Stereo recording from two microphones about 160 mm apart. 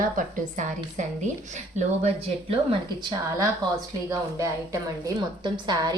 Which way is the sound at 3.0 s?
25° right (ahead or behind).